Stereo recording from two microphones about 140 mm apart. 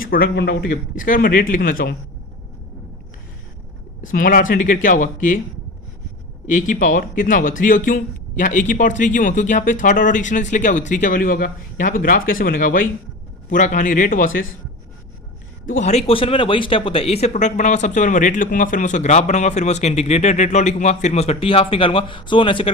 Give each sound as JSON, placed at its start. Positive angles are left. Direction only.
{"t": 0.0, "sound": "a man's voice", "side_deg": 90}
{"t": 4.0, "sound": "speech", "side_deg": 85}
{"t": 6.5, "sound": "speech", "side_deg": 65}
{"t": 13.5, "sound": "speech", "side_deg": 65}
{"t": 15.6, "sound": "a man's voice", "side_deg": 80}
{"t": 15.9, "sound": "speech", "side_deg": 45}